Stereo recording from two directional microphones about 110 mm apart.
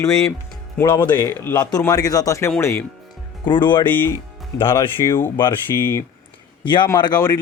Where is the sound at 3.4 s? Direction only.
45° left (ahead or behind).